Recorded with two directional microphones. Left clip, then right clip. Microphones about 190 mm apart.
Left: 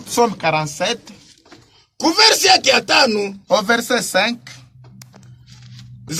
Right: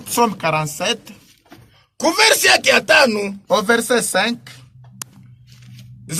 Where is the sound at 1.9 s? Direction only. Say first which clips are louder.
Left 1 dB; 5° left (ahead or behind).